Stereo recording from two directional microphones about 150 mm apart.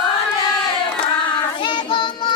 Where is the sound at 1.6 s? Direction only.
30° left (ahead or behind).